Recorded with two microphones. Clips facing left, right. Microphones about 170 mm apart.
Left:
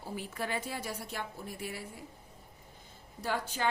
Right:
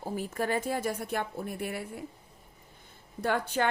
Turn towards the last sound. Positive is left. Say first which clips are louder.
# right 6 dB
turn(degrees=-60)  # may be behind; listen again after turning